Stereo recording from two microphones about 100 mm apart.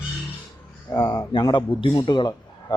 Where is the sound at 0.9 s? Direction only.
40° left (ahead or behind).